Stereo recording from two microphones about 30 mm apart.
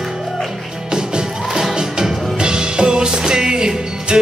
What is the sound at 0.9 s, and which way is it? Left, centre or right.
Music, right.